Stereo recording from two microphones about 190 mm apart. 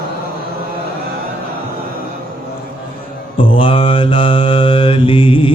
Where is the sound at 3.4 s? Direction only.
25° left (ahead or behind).